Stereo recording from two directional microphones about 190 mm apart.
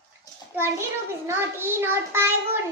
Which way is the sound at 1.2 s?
10° right (ahead or behind).